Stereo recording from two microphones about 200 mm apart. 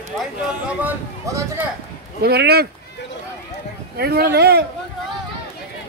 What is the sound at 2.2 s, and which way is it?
Speech, 50° right (ahead or behind).